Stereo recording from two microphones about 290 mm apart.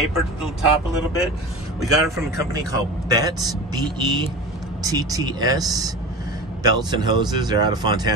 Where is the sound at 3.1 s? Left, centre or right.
Centre.